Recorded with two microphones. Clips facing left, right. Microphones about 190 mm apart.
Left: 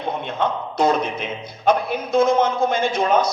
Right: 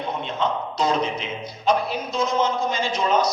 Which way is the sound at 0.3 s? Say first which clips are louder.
Left 3 dB; 55° left (ahead or behind).